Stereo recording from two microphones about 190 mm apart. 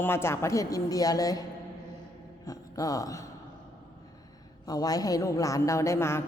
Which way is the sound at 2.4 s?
20° left (ahead or behind).